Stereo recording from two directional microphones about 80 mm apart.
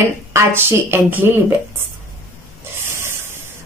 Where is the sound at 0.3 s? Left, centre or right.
Right.